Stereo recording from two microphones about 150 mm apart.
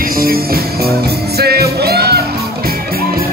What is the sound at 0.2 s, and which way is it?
Music, 85° right.